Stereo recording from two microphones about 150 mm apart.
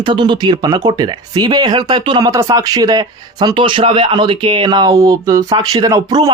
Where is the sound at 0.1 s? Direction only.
30° right (ahead or behind).